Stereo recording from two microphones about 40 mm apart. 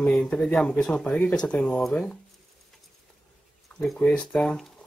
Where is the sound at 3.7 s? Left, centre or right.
Left.